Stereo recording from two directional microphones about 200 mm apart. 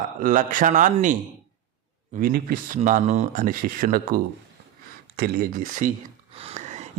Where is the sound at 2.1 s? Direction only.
45° right (ahead or behind).